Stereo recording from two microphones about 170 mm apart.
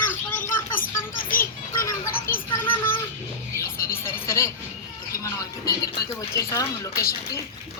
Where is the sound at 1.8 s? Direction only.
15° left (ahead or behind).